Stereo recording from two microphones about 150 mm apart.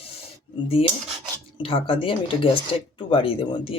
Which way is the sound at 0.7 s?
40° left (ahead or behind).